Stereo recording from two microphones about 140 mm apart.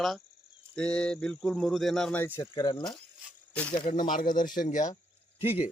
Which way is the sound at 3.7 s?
75° left (ahead or behind).